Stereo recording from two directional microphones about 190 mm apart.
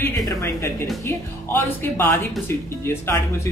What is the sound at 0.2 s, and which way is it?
A man's voice, 15° left (ahead or behind).